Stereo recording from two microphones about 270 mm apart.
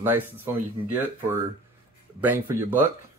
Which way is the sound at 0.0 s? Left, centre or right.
Centre.